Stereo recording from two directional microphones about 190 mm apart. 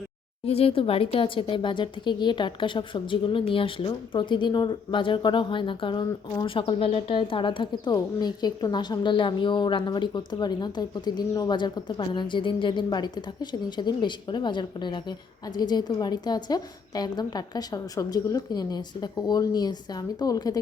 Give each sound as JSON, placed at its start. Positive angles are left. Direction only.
{"t": 0.4, "sound": "speech", "side_deg": 30}